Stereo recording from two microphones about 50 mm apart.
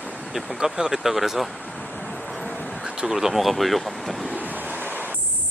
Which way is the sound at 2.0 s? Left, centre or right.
Left.